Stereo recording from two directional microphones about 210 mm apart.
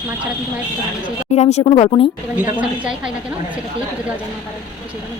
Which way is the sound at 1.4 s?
30° left (ahead or behind).